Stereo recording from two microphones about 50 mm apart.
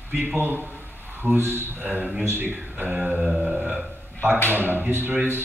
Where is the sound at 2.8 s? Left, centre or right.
Centre.